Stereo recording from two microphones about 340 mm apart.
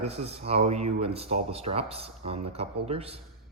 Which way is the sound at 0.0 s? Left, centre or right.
Centre.